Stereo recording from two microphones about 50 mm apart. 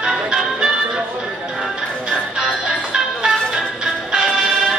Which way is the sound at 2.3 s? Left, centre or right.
Centre.